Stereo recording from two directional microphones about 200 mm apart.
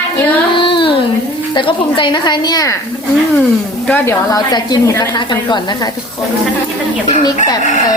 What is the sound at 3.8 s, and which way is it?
A woman's voice, 10° left (ahead or behind).